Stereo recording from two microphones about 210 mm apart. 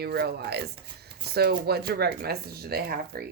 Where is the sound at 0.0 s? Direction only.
50° right (ahead or behind).